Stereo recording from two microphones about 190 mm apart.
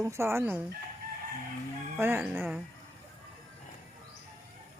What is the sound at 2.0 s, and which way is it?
Speech, 10° right (ahead or behind).